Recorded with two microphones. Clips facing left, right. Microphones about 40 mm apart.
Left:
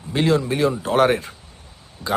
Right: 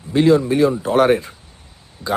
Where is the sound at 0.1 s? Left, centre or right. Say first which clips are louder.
Right 5 dB; left.